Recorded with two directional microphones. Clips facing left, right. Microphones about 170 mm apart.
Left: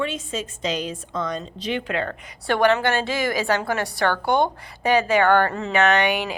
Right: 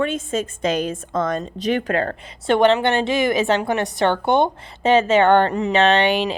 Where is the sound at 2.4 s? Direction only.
20° right (ahead or behind).